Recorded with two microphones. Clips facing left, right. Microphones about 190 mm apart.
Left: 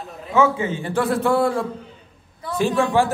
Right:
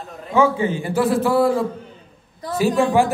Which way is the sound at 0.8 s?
5° right (ahead or behind).